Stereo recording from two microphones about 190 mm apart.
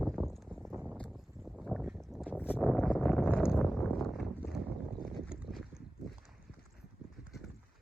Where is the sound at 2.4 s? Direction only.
5° left (ahead or behind).